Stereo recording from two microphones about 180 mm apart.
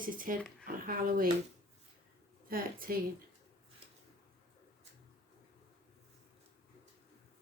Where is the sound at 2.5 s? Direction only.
55° right (ahead or behind).